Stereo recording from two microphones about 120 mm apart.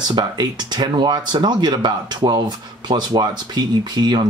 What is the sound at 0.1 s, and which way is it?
Speech, 35° right (ahead or behind).